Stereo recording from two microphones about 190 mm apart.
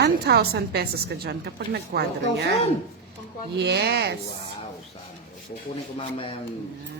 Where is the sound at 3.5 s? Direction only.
60° right (ahead or behind).